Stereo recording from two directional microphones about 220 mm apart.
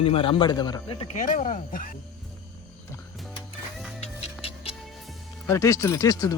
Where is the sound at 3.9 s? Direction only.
30° left (ahead or behind).